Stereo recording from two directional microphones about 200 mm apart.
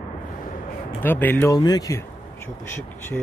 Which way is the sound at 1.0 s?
10° left (ahead or behind).